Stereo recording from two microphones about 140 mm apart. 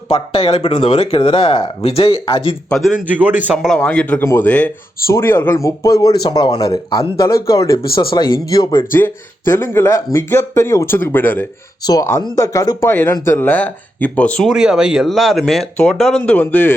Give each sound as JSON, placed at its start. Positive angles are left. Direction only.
{"t": 0.4, "sound": "speech", "side_deg": 40}
{"t": 2.6, "sound": "speech", "side_deg": 0}
{"t": 3.1, "sound": "a man's voice", "side_deg": -10}
{"t": 3.8, "sound": "speech", "side_deg": 10}
{"t": 8.1, "sound": "speech", "side_deg": 30}
{"t": 8.9, "sound": "speech", "side_deg": 15}
{"t": 11.8, "sound": "speech", "side_deg": 25}
{"t": 14.5, "sound": "speech", "side_deg": -5}